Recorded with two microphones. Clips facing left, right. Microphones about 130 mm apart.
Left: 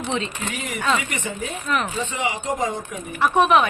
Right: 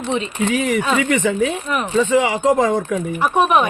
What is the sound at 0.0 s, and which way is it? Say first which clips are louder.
Speech: right 4 dB; 15° right (ahead or behind).